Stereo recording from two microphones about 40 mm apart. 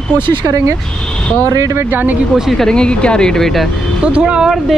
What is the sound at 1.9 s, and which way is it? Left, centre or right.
Speech, right.